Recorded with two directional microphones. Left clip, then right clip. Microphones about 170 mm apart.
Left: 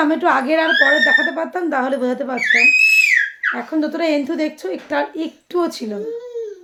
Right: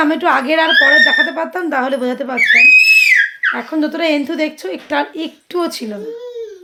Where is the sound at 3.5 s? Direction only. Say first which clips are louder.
Right 3 dB; 20° right (ahead or behind).